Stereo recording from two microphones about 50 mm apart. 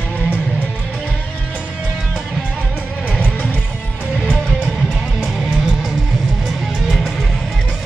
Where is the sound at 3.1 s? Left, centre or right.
Left.